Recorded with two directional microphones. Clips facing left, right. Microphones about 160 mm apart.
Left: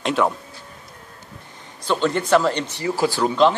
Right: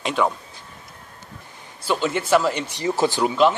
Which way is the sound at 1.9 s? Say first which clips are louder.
Left 1 dB; 5° right (ahead or behind).